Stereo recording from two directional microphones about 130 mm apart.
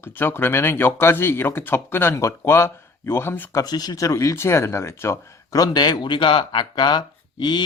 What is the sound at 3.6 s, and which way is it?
Speech, 30° left (ahead or behind).